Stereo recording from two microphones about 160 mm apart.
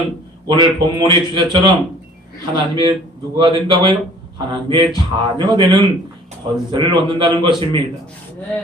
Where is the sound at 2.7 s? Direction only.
30° right (ahead or behind).